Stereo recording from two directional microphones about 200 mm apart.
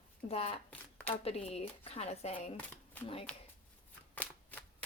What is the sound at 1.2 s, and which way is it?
Speech, 30° left (ahead or behind).